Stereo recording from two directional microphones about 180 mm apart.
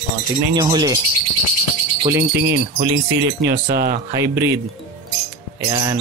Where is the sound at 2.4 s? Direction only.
65° right (ahead or behind).